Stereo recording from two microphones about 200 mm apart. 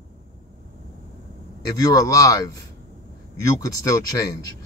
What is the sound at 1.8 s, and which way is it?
Speech, 15° left (ahead or behind).